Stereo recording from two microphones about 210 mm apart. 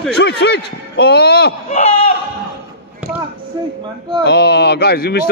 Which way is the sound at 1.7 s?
30° left (ahead or behind).